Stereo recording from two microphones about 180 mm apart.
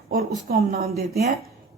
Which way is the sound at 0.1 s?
55° right (ahead or behind).